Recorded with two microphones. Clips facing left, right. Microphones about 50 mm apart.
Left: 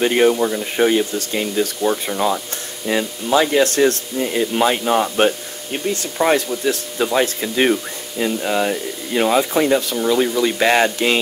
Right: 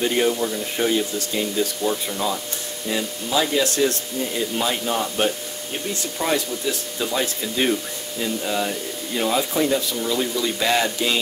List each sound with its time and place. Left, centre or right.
0.0 s speech: left